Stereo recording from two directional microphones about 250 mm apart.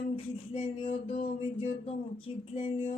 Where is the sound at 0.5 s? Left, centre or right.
Left.